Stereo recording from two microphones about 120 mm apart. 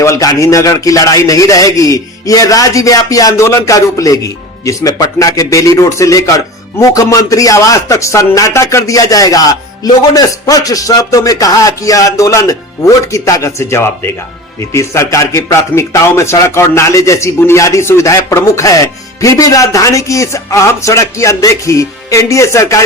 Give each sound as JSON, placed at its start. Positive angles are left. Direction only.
{"t": 0.0, "sound": "a man's voice", "side_deg": 30}